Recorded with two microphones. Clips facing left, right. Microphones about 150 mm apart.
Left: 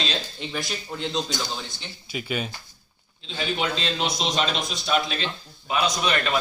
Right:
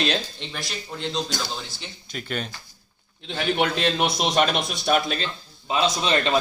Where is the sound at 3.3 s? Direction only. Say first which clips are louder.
Right 4 dB; 55° right (ahead or behind).